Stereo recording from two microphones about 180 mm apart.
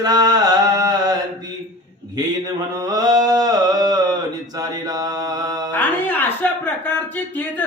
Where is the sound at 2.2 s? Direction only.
20° right (ahead or behind).